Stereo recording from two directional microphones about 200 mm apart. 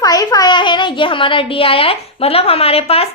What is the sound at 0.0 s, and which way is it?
A child's voice, 20° left (ahead or behind).